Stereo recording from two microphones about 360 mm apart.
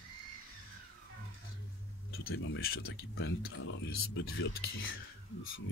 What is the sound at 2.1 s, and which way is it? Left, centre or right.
Speech, left.